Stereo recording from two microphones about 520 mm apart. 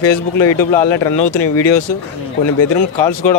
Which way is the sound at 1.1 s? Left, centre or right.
Left.